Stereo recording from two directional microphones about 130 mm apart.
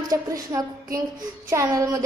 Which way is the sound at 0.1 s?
25° right (ahead or behind).